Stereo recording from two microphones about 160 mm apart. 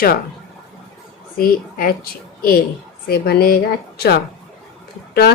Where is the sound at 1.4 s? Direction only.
70° left (ahead or behind).